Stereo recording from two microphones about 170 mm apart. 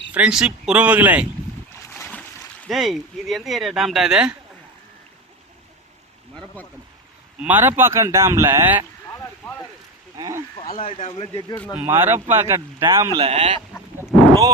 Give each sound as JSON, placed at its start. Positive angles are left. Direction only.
{"t": 0.1, "sound": "speech", "side_deg": -5}
{"t": 1.7, "sound": "boat", "side_deg": 15}
{"t": 2.6, "sound": "speech", "side_deg": 0}
{"t": 6.6, "sound": "speech", "side_deg": 10}
{"t": 7.4, "sound": "speech", "side_deg": -10}
{"t": 9.1, "sound": "a sound", "side_deg": 10}
{"t": 10.2, "sound": "speech", "side_deg": -20}
{"t": 10.8, "sound": "a man's voice", "side_deg": 35}
{"t": 11.7, "sound": "speech", "side_deg": -15}
{"t": 13.1, "sound": "speech", "side_deg": -35}